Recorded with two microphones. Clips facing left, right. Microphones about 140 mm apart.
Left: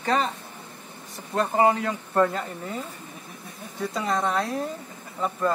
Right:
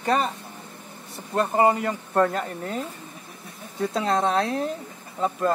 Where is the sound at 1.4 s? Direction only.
Centre (ahead or behind).